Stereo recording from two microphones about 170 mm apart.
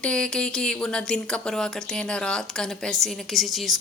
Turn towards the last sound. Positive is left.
turn(degrees=0)  # may be behind; listen again after turning